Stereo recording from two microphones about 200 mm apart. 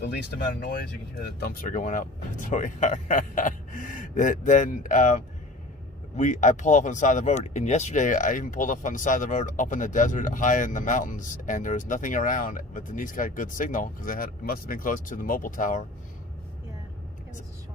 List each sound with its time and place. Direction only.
0.0 s speech: 55° left (ahead or behind)